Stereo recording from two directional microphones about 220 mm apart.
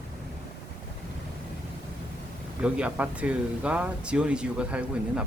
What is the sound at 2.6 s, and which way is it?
Speech, 5° right (ahead or behind).